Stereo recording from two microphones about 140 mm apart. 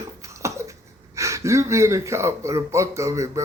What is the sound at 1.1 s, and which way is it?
Speech, 20° right (ahead or behind).